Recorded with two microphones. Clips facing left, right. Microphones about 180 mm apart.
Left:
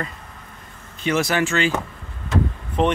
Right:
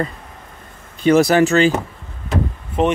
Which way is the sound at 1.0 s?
35° right (ahead or behind).